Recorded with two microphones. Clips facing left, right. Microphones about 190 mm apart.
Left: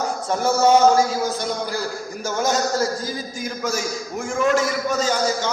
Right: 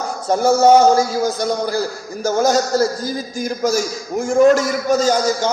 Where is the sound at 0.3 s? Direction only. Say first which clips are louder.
Right 7 dB; 40° right (ahead or behind).